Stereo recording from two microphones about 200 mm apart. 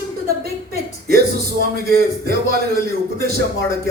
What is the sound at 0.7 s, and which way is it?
Speech, 50° right (ahead or behind).